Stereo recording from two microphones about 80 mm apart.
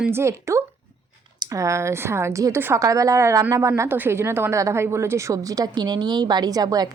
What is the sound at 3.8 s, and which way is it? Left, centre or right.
Speech, right.